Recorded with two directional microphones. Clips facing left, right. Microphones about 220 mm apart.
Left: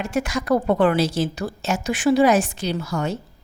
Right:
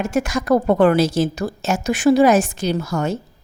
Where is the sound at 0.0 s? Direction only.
45° right (ahead or behind).